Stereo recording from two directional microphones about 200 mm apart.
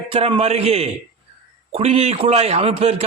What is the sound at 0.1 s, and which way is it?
A man's voice, 30° right (ahead or behind).